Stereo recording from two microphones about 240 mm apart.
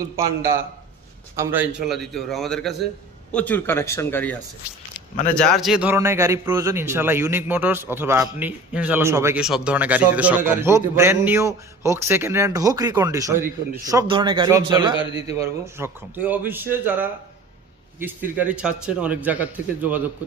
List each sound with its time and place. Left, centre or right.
0.0 s a man's voice: centre